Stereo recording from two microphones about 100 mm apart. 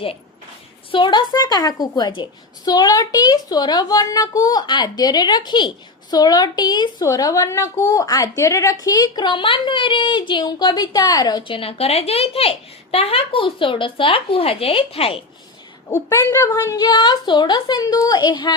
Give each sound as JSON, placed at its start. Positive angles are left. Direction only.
{"t": 0.9, "sound": "a woman's voice", "side_deg": 55}
{"t": 7.0, "sound": "a woman's voice", "side_deg": 35}
{"t": 16.0, "sound": "a woman's voice", "side_deg": 30}